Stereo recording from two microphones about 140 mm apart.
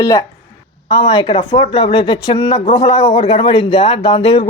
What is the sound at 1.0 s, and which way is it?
Speech, 40° left (ahead or behind).